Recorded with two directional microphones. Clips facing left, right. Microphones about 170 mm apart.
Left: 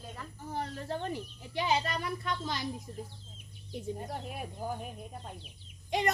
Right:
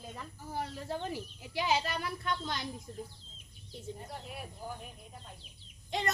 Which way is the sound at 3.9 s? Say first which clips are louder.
Left 5 dB; 50° left (ahead or behind).